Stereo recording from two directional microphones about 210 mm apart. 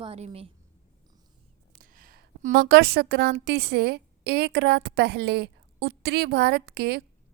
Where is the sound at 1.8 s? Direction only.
40° right (ahead or behind).